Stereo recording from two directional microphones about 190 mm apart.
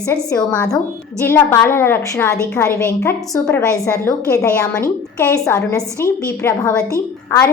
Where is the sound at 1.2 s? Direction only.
10° left (ahead or behind).